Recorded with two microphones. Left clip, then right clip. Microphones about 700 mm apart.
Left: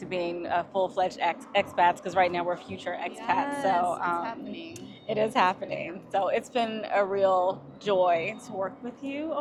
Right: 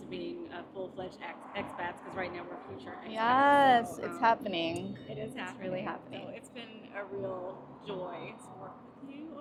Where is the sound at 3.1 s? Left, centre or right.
Right.